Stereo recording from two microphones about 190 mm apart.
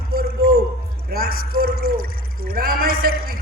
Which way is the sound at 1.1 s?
55° right (ahead or behind).